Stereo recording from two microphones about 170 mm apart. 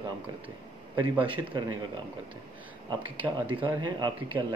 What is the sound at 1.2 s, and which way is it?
Speech, 30° right (ahead or behind).